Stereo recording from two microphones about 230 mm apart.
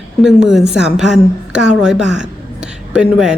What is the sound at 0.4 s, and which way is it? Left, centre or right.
A woman's voice, centre.